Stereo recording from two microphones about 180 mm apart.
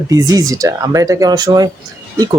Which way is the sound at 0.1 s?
20° right (ahead or behind).